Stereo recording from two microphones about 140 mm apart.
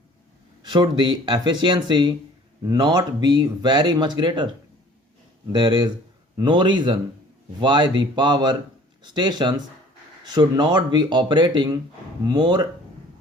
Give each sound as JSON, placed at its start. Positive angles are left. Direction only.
{"t": 0.6, "sound": "speech", "side_deg": -35}
{"t": 5.5, "sound": "speech", "side_deg": -30}